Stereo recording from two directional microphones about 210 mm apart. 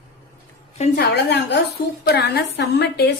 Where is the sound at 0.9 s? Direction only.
55° left (ahead or behind).